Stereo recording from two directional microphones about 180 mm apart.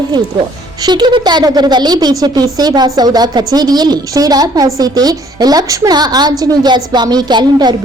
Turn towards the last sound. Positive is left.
turn(degrees=-25)  # may be behind; listen again after turning